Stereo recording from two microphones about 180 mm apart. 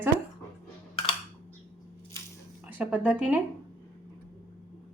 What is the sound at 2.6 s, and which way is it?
Speech, 10° right (ahead or behind).